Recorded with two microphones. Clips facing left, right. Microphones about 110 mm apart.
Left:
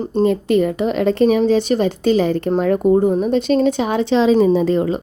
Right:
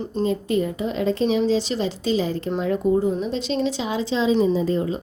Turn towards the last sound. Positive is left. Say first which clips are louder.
# left 6 dB
turn(degrees=70)  # may be behind; listen again after turning